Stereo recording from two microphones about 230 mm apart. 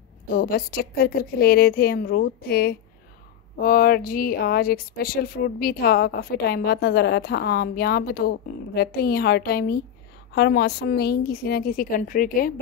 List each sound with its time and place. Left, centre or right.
0.3 s a woman's voice: left